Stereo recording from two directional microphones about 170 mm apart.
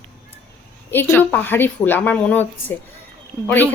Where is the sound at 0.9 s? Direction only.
10° left (ahead or behind).